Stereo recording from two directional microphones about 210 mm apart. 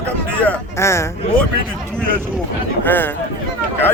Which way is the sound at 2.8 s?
10° left (ahead or behind).